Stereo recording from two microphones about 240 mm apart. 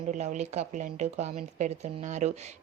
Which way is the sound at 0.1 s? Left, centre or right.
Right.